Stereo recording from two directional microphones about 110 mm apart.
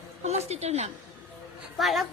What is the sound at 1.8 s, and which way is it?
Speech, centre (ahead or behind).